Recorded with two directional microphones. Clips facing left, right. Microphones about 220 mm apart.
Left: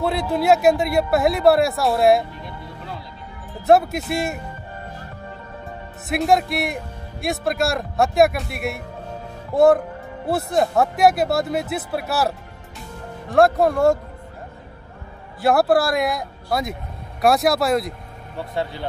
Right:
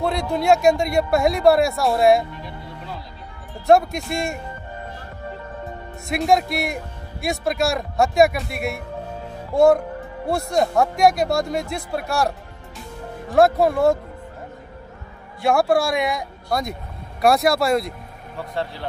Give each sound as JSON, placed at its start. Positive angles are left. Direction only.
{"t": 0.0, "sound": "a man's voice", "side_deg": 5}
{"t": 3.6, "sound": "a man's voice", "side_deg": 5}
{"t": 6.0, "sound": "a man's voice", "side_deg": 0}
{"t": 15.4, "sound": "a man's voice", "side_deg": 0}